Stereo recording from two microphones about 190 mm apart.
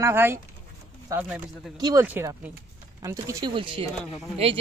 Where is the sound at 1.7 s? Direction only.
20° right (ahead or behind).